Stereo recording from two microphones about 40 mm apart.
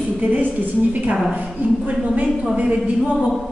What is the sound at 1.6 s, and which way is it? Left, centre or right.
Speech, right.